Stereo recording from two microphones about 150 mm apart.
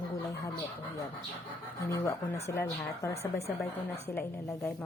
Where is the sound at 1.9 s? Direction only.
20° left (ahead or behind).